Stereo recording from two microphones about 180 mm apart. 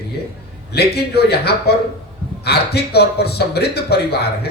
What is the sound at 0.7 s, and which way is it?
Speech, 65° left (ahead or behind).